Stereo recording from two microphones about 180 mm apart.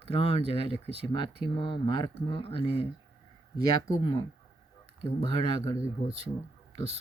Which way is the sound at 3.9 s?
25° left (ahead or behind).